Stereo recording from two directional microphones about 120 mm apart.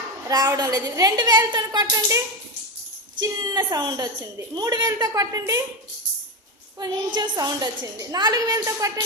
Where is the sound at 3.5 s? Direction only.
35° right (ahead or behind).